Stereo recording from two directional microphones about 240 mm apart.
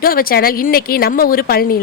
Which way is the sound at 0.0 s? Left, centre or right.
Left.